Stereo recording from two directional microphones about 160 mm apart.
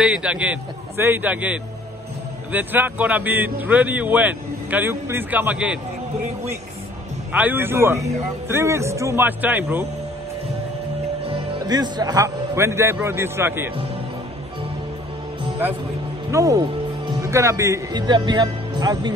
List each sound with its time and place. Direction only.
0.0 s a man's voice: 5° right (ahead or behind)
7.3 s a man's voice: 10° right (ahead or behind)
11.6 s a man's voice: 25° right (ahead or behind)
16.3 s speech: 20° right (ahead or behind)